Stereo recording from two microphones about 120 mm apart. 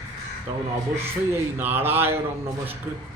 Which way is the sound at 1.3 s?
20° right (ahead or behind).